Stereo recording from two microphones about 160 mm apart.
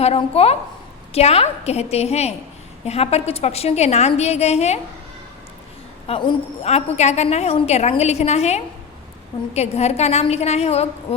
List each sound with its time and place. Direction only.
0.0 s a woman's voice: 40° left (ahead or behind)
6.1 s a woman's voice: 35° left (ahead or behind)